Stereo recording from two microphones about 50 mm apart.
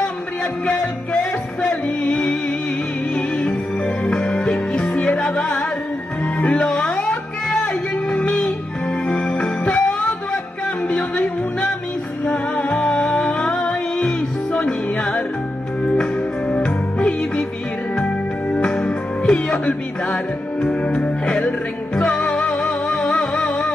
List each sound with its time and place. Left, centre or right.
1.6 s music: centre